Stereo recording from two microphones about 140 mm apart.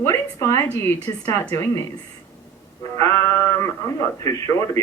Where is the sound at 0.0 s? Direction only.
20° left (ahead or behind).